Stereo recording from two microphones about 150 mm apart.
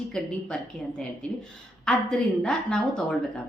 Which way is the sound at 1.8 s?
5° left (ahead or behind).